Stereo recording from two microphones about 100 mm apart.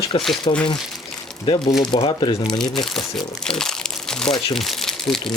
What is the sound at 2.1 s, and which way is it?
Speech, 50° left (ahead or behind).